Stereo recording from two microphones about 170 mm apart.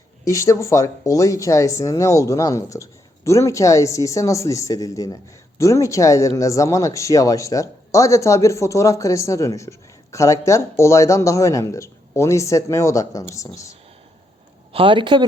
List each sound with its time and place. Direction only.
0.3 s speech: 20° left (ahead or behind)
14.7 s a man's voice: 30° right (ahead or behind)